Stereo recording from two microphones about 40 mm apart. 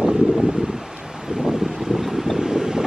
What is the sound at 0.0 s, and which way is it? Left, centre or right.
Wind, right.